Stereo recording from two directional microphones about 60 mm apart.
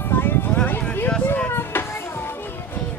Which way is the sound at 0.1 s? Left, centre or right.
Left.